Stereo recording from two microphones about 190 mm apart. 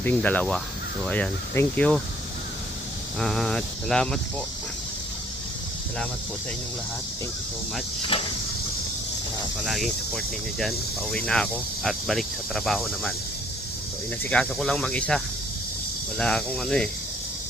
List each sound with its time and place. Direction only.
0.0 s speech: 10° left (ahead or behind)
3.2 s speech: centre (ahead or behind)
8.1 s a sound: 30° left (ahead or behind)
9.6 s speech: centre (ahead or behind)
14.3 s speech: 5° left (ahead or behind)